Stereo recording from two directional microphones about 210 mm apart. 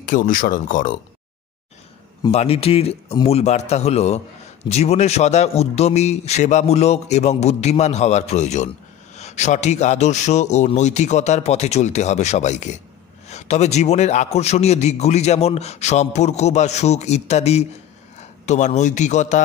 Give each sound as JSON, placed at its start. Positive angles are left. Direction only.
{"t": 0.0, "sound": "a man's voice", "side_deg": 40}
{"t": 2.3, "sound": "a man's voice", "side_deg": 30}